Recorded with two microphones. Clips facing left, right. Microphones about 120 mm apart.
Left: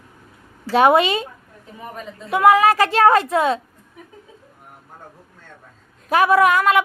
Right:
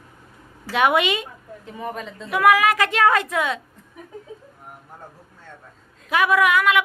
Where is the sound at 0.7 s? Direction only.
35° left (ahead or behind).